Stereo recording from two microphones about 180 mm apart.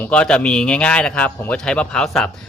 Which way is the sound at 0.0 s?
5° left (ahead or behind).